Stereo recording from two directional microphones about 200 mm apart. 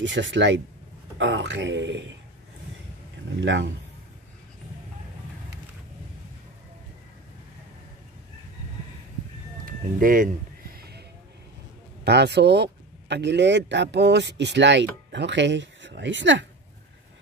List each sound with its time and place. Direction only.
0.0 s speech: 65° right (ahead or behind)
3.3 s speech: 65° right (ahead or behind)
9.7 s music: 45° right (ahead or behind)
12.0 s speech: 55° right (ahead or behind)